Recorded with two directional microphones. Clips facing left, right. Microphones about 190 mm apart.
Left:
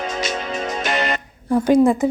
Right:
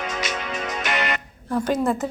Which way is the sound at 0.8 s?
30° left (ahead or behind).